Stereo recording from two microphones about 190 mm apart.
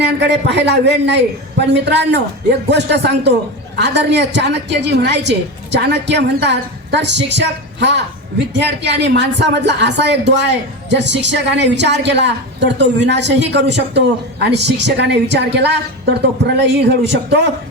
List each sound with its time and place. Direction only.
0.0 s speech: 65° right (ahead or behind)